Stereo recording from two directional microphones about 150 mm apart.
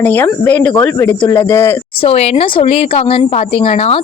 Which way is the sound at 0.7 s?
20° left (ahead or behind).